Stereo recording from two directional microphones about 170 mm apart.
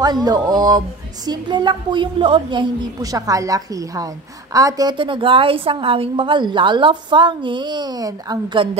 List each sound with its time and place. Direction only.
0.0 s a woman's voice: 25° right (ahead or behind)